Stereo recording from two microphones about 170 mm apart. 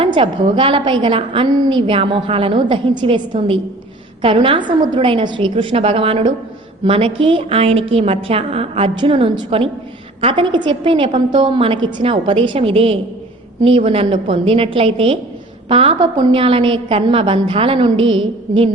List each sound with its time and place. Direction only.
0.0 s a woman's voice: 30° right (ahead or behind)